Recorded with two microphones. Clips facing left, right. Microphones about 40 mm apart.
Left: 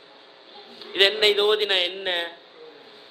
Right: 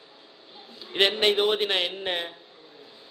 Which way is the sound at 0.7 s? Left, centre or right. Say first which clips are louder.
Left 3 dB; left.